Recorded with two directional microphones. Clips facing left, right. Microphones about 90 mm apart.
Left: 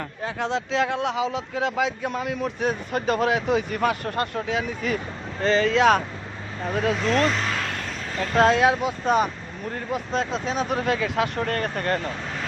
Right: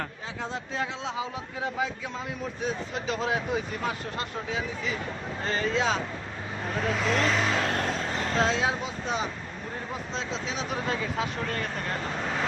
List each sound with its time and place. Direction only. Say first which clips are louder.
0.3 s speech: left 8 dB; 85° left
2.0 s speech: left 8 dB; 65° left (ahead or behind)
5.4 s speech: left 9 dB; 90° left; by 6.0 s 70° left (ahead or behind)
6.9 s speech: left 1 dB; centre (ahead or behind)
8.4 s speech: left 9 dB; 55° left (ahead or behind)
10.8 s speech: left 6 dB; 85° left; by 11.9 s 60° left (ahead or behind)